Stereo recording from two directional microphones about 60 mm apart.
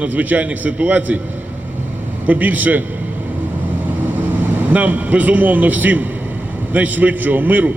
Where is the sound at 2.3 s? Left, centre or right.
Right.